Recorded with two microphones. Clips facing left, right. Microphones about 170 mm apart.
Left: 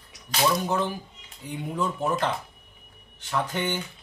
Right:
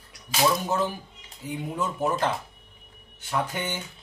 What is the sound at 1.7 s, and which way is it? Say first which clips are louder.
Speech: left 1 dB; 10° right (ahead or behind).